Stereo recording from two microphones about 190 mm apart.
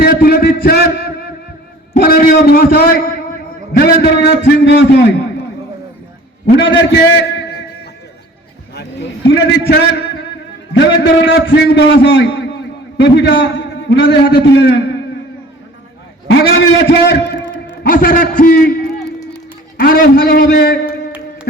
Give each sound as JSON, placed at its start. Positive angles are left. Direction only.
{"t": 0.0, "sound": "a sound", "side_deg": 55}
{"t": 2.0, "sound": "a man's voice", "side_deg": 50}
{"t": 4.6, "sound": "a man's voice", "side_deg": 65}
{"t": 6.6, "sound": "a man's voice", "side_deg": 75}
{"t": 8.7, "sound": "a sound", "side_deg": 65}
{"t": 10.8, "sound": "a man's voice", "side_deg": 65}
{"t": 16.3, "sound": "a man's voice", "side_deg": 70}
{"t": 17.8, "sound": "a man's voice", "side_deg": 45}
{"t": 19.8, "sound": "a man's voice", "side_deg": 50}